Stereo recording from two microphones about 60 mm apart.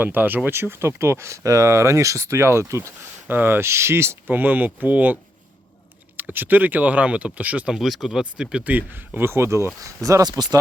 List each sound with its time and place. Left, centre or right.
0.0 s speech: right
3.2 s speech: right
3.7 s speech: right
4.4 s speech: right
6.1 s speech: right
7.7 s speech: centre
8.2 s speech: centre
8.7 s speech: right
9.8 s speech: right